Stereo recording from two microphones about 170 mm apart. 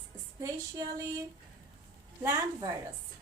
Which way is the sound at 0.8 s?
20° right (ahead or behind).